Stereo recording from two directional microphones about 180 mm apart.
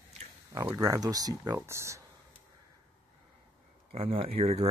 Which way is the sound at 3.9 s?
30° right (ahead or behind).